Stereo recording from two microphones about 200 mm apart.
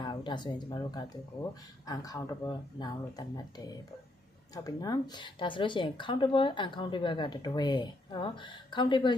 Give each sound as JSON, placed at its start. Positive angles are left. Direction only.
{"t": 0.0, "sound": "speech", "side_deg": 20}